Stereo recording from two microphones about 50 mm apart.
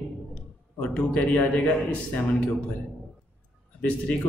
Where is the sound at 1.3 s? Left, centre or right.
Left.